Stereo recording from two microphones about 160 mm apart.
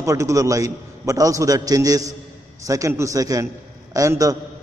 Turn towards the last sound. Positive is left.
turn(degrees=-20)  # may be behind; listen again after turning